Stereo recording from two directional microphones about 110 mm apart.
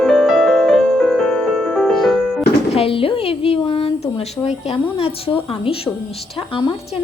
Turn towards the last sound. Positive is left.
turn(degrees=60)  # may be behind; listen again after turning